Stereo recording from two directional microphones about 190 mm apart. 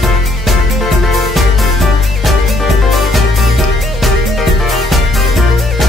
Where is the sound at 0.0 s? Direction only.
Centre (ahead or behind).